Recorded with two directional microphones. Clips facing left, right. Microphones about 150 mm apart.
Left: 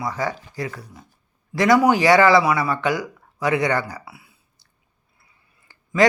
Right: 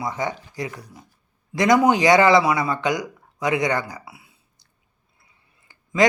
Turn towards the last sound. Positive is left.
turn(degrees=-20)  # may be behind; listen again after turning